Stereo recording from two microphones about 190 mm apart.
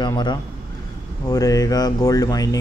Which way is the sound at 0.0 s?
25° left (ahead or behind).